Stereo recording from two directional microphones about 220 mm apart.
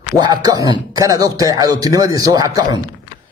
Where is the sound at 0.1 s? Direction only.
20° right (ahead or behind).